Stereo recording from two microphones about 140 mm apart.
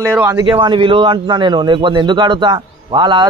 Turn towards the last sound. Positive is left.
turn(degrees=-35)  # may be behind; listen again after turning